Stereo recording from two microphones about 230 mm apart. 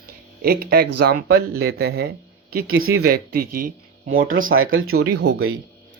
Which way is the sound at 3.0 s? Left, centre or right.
Right.